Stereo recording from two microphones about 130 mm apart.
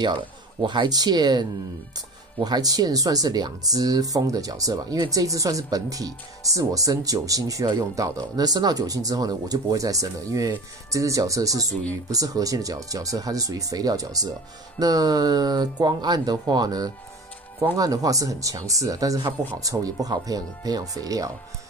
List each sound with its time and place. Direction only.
0.6 s speech: 35° right (ahead or behind)